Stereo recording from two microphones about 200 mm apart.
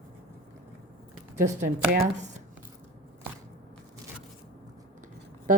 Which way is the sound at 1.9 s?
40° right (ahead or behind).